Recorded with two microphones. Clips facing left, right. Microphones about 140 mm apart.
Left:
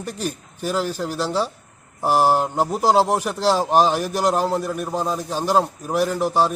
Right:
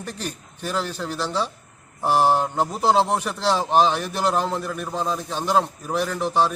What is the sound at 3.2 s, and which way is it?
Speech, 40° left (ahead or behind).